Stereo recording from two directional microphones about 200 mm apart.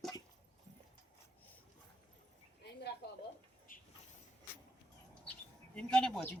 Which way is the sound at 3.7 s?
45° left (ahead or behind).